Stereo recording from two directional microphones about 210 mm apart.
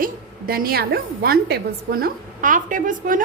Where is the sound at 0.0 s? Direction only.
45° right (ahead or behind).